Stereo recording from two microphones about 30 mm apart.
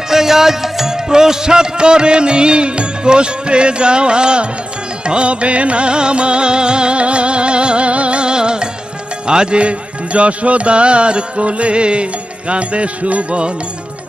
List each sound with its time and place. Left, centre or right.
0.1 s music: centre; by 13.5 s right